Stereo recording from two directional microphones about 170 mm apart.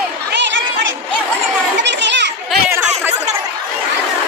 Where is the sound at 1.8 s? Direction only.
90° right.